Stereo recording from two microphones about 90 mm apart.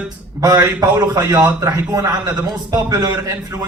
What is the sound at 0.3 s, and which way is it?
A man's voice, 40° right (ahead or behind).